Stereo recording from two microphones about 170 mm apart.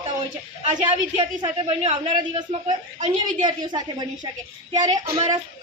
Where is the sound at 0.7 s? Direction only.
35° right (ahead or behind).